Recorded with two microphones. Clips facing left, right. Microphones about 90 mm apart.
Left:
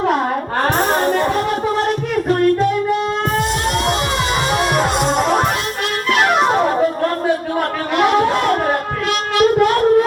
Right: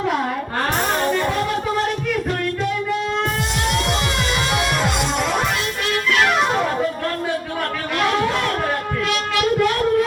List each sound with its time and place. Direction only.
0.6 s music: 40° left (ahead or behind)
4.5 s music: 40° left (ahead or behind)
7.9 s a sound: 30° left (ahead or behind)